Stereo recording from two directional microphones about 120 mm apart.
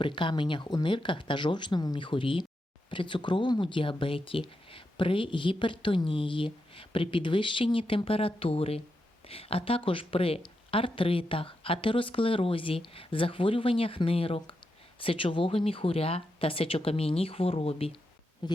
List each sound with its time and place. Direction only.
0.0 s speech: 40° left (ahead or behind)
18.4 s speech: 40° left (ahead or behind)